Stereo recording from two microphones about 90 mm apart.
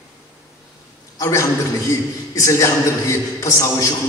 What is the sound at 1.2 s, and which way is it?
A man's voice, 35° left (ahead or behind).